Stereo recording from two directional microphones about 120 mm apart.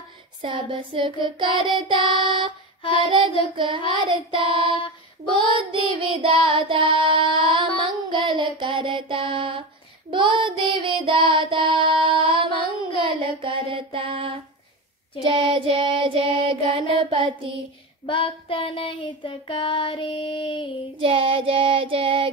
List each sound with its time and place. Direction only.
0.4 s child singing: 45° right (ahead or behind)
18.0 s child singing: 45° left (ahead or behind)
20.9 s child singing: 50° right (ahead or behind)